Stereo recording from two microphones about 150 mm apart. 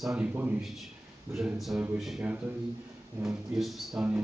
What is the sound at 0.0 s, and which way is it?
Speech, 5° right (ahead or behind).